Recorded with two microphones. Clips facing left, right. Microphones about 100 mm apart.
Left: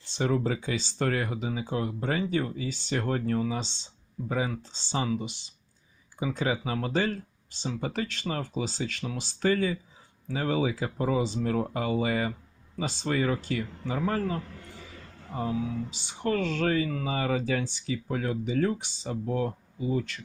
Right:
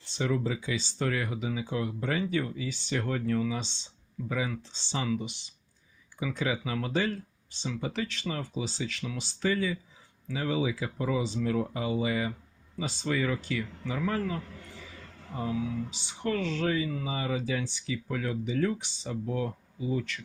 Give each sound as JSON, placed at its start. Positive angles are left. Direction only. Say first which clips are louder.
{"t": 0.2, "sound": "speech", "louder": "left 3 dB", "side_deg": 40}